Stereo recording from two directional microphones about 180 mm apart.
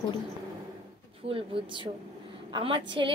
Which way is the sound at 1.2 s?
30° right (ahead or behind).